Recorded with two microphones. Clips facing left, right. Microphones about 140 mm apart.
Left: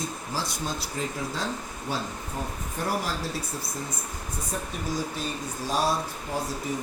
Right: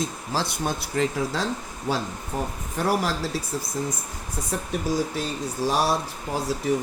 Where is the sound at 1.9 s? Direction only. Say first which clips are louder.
Right 5 dB; 90° right.